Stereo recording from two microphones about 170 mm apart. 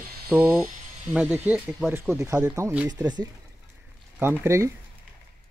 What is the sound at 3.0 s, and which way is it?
Speech, 25° right (ahead or behind).